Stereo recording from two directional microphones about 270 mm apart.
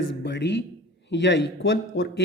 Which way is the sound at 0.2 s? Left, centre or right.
Left.